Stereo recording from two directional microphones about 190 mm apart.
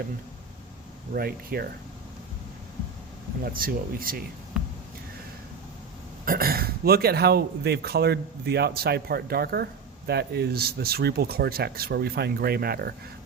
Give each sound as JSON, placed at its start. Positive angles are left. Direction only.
{"t": 1.1, "sound": "speech", "side_deg": -50}
{"t": 3.4, "sound": "speech", "side_deg": -50}
{"t": 6.2, "sound": "speech", "side_deg": -50}